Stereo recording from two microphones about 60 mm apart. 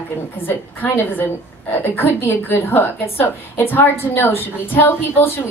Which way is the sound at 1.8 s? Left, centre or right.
Left.